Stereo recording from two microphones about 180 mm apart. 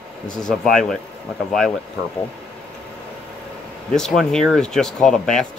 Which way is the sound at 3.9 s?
Centre (ahead or behind).